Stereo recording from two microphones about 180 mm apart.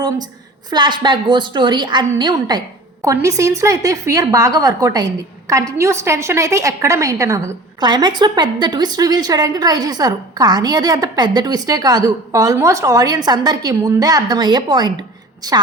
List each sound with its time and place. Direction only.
0.7 s a woman's voice: 25° right (ahead or behind)